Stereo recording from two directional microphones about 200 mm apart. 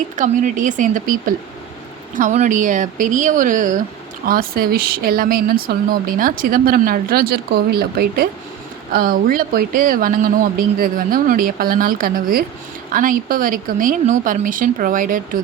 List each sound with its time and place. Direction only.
0.2 s speech: 40° right (ahead or behind)
2.1 s speech: 40° right (ahead or behind)